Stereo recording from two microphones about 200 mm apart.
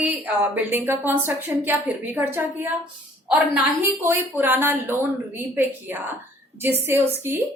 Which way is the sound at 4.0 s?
10° right (ahead or behind).